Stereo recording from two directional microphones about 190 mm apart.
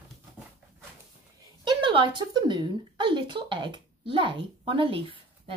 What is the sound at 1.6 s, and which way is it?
Speech, 25° right (ahead or behind).